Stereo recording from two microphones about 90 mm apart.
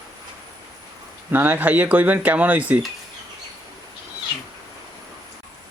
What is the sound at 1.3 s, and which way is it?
Speech, 20° right (ahead or behind).